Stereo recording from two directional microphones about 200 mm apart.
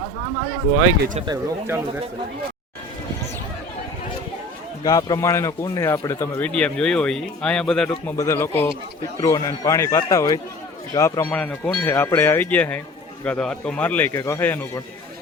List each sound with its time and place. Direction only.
1.2 s speech: 15° right (ahead or behind)
4.8 s a man's voice: 20° left (ahead or behind)
11.3 s speech: 5° left (ahead or behind)